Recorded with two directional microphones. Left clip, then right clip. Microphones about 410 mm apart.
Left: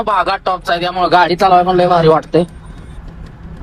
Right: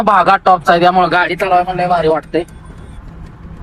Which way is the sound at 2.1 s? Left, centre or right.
Right.